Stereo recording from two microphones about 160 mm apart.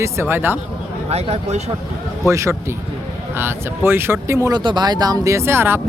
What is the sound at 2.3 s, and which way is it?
Speech, 20° right (ahead or behind).